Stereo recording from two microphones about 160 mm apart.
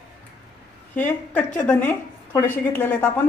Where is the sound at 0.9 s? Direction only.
10° left (ahead or behind).